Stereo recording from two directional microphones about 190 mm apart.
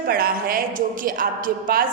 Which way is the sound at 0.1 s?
50° right (ahead or behind).